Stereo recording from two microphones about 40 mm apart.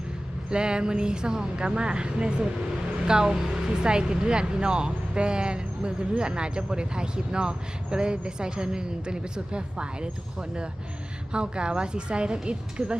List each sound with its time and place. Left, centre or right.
0.5 s speech: right
11.3 s speech: right